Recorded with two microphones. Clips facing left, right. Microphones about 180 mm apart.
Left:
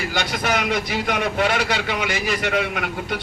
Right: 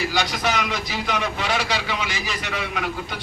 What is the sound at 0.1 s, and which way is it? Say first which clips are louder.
A man's voice: left 1 dB; 55° left (ahead or behind).